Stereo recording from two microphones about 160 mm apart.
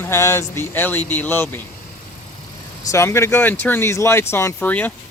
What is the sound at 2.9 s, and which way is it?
Speech, 15° left (ahead or behind).